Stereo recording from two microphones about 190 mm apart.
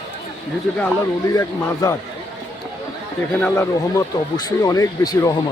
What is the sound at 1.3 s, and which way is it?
Speech, 15° left (ahead or behind).